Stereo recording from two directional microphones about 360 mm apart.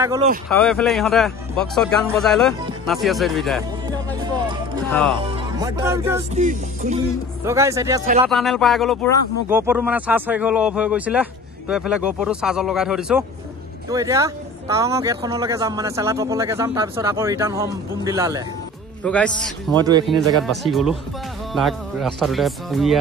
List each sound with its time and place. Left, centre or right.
0.0 s speech: centre
0.5 s a man's voice: centre
3.8 s music: centre
4.8 s speech: centre
5.1 s music: centre
6.3 s music: right
7.4 s a man's voice: centre
19.0 s a man's voice: centre
19.8 s speech: centre
20.4 s a man's voice: centre